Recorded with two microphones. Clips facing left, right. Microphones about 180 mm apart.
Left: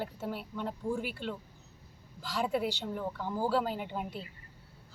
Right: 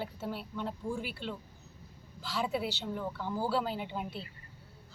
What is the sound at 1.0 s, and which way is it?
Speech, 50° left (ahead or behind).